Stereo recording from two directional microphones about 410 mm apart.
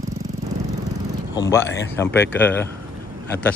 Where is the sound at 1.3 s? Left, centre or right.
Centre.